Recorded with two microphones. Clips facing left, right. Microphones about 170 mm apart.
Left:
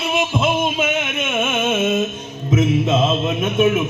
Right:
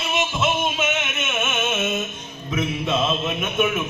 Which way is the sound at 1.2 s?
30° left (ahead or behind).